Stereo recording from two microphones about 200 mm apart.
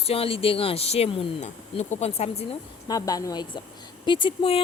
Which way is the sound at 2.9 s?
20° left (ahead or behind).